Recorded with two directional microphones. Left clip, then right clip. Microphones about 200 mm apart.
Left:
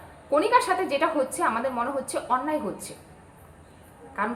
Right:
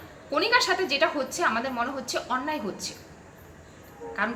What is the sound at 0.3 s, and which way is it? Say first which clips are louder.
A woman's voice: left 2 dB; centre (ahead or behind).